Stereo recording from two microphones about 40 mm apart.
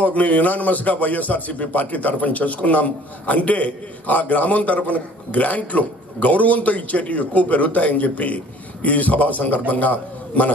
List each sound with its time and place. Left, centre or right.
0.0 s a man's voice: left